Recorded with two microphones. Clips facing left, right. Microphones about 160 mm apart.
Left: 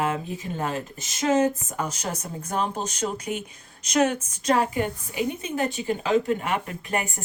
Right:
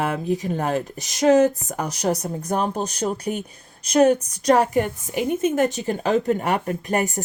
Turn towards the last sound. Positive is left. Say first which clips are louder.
# right 6 dB
turn(degrees=-40)  # may be behind; listen again after turning